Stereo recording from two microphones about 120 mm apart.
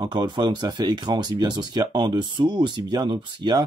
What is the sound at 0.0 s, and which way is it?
Speech, 35° right (ahead or behind).